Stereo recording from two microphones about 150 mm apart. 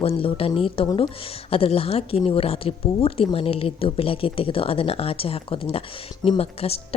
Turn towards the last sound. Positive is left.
turn(degrees=40)  # may be behind; listen again after turning